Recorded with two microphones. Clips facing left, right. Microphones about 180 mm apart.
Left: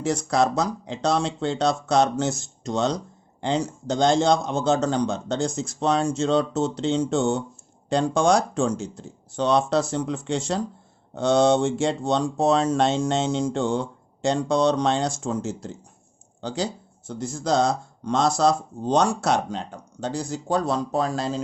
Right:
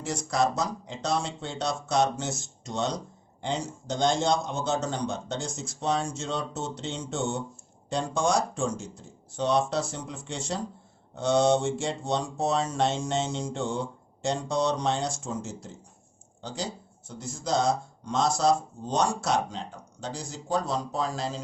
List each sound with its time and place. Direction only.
0.0 s a man's voice: 65° left (ahead or behind); by 7.3 s 90° left
7.9 s speech: 75° left (ahead or behind)
9.3 s a man's voice: 90° left
13.5 s a man's voice: 90° left
16.4 s speech: 70° left (ahead or behind)